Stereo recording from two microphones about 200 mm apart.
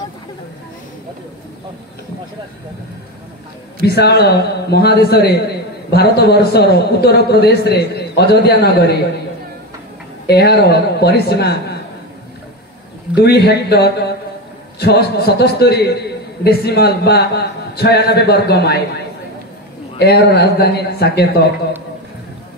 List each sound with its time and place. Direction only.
3.8 s a man's voice: 55° left (ahead or behind)
10.2 s a man's voice: 55° left (ahead or behind)
13.1 s a man's voice: 55° left (ahead or behind)